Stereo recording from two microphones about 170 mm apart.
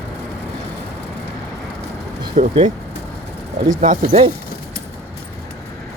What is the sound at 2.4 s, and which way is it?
Speech, 35° right (ahead or behind).